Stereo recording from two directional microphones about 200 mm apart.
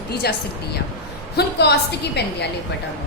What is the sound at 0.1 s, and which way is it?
Speech, 50° left (ahead or behind).